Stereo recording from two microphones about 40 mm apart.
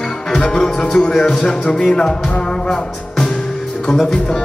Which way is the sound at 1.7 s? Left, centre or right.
Centre.